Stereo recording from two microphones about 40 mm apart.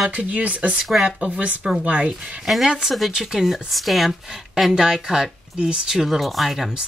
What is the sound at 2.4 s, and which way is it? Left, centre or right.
Speech, centre.